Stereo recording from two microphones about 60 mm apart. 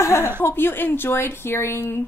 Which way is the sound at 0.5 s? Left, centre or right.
Left.